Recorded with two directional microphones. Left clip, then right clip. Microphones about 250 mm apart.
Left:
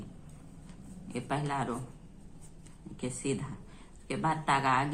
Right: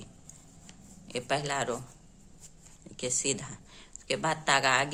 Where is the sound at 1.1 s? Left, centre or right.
Right.